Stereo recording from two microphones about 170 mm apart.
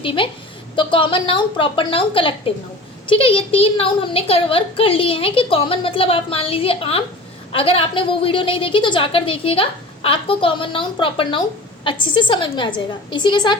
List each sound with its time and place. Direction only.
0.0 s a woman's voice: 30° left (ahead or behind)